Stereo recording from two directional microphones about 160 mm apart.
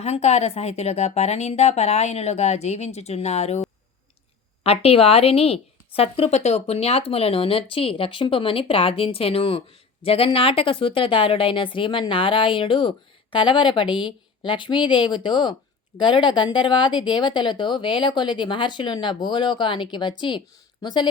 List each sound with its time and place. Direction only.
0.0 s speech: 40° left (ahead or behind)
4.6 s speech: 40° left (ahead or behind)